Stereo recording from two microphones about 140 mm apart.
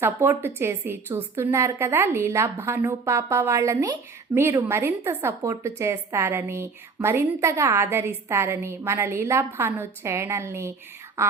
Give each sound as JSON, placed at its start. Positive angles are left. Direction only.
{"t": 0.0, "sound": "a woman's voice", "side_deg": -15}